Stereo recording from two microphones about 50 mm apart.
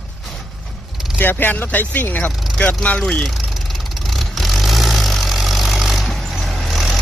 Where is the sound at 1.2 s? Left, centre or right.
Left.